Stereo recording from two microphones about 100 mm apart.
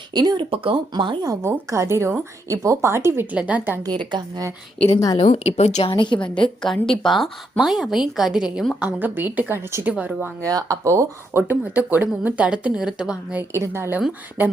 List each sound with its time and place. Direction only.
0.1 s a woman's voice: 45° right (ahead or behind)
0.5 s speech: 60° right (ahead or behind)
1.2 s a woman's voice: 30° right (ahead or behind)
3.3 s speech: 15° right (ahead or behind)
3.8 s a woman's voice: 45° right (ahead or behind)
5.1 s a woman's voice: 85° left
5.9 s a woman's voice: 55° left (ahead or behind)
6.6 s speech: 5° left (ahead or behind)
8.8 s speech: 15° right (ahead or behind)
10.4 s speech: 35° right (ahead or behind); by 13.4 s 10° right (ahead or behind)
13.5 s a woman's voice: 25° right (ahead or behind)